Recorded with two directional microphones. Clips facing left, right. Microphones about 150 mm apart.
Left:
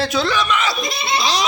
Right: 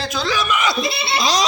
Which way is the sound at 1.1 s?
40° right (ahead or behind).